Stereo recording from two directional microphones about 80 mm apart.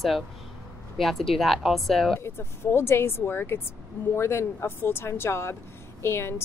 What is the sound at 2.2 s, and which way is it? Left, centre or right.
A woman's voice, left.